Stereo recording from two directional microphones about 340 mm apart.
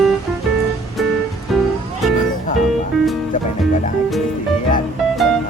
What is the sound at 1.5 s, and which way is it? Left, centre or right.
Music, centre.